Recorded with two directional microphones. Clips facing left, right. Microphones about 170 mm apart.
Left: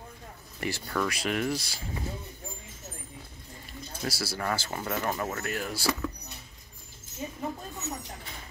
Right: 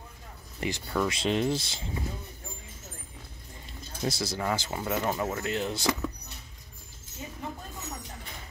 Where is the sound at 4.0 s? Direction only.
20° right (ahead or behind).